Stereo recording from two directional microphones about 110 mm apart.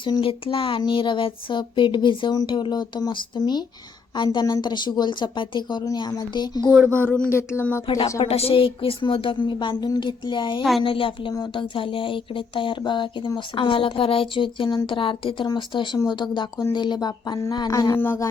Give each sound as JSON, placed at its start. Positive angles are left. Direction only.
{"t": 0.0, "sound": "speech", "side_deg": 50}
{"t": 6.8, "sound": "speech", "side_deg": 15}
{"t": 8.2, "sound": "speech", "side_deg": 65}
{"t": 10.6, "sound": "speech", "side_deg": 0}
{"t": 10.8, "sound": "speech", "side_deg": 50}
{"t": 18.0, "sound": "speech", "side_deg": 20}